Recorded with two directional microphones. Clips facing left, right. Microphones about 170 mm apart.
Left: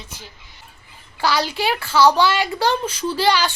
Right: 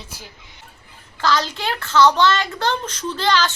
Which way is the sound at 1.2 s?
10° left (ahead or behind).